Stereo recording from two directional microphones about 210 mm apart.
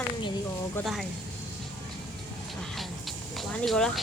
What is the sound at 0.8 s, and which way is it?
Speech, centre (ahead or behind).